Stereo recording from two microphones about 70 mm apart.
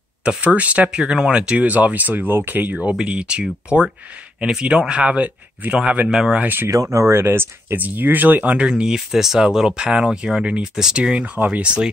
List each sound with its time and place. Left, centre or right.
0.2 s speech: centre
2.8 s speech: centre
6.0 s speech: centre
6.4 s speech: right
6.7 s speech: right
8.5 s speech: centre